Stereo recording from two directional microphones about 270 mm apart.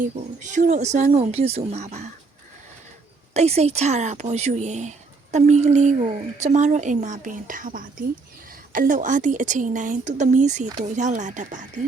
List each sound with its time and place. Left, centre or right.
0.0 s speech: right
3.3 s speech: right